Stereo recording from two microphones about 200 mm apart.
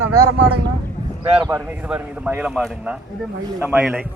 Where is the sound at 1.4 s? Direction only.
15° right (ahead or behind).